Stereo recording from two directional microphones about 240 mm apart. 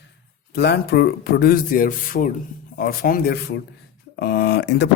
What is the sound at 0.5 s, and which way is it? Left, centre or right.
Speech, left.